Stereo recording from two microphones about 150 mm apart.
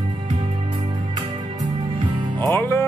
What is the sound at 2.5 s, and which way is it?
Music, 15° left (ahead or behind).